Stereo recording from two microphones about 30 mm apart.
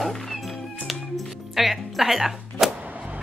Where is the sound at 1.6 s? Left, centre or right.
Centre.